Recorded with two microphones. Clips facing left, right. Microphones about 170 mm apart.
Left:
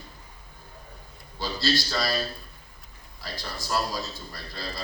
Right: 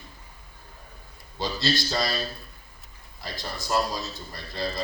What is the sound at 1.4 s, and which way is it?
Speech, 20° right (ahead or behind).